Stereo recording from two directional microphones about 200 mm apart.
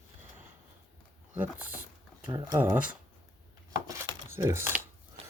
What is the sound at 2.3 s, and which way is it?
Speech, 20° right (ahead or behind).